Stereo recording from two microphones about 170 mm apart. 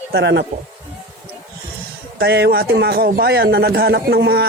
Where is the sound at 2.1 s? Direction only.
75° right (ahead or behind).